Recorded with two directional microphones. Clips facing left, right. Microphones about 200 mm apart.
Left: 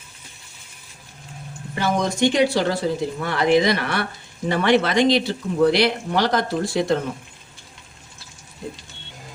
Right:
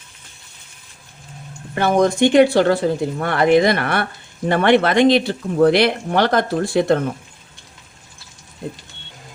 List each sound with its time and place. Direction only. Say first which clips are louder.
1.7 s speech: right 6 dB; 55° right (ahead or behind)